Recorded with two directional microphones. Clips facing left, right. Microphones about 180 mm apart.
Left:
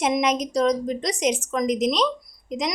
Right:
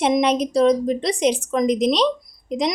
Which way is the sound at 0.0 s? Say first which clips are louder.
Right 4 dB; 30° right (ahead or behind).